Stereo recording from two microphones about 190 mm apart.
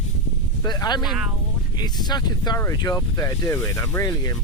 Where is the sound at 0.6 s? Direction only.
20° left (ahead or behind).